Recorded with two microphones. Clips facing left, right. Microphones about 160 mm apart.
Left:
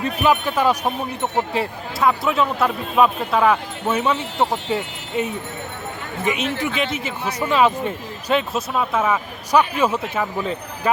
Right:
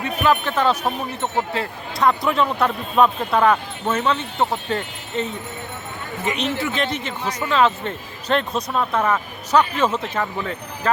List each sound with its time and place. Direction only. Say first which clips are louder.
0.2 s speech: even; 10° left (ahead or behind)
10.4 s speech: left 1 dB; 20° left (ahead or behind)